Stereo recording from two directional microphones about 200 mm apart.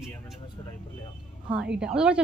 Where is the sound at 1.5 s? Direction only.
5° right (ahead or behind).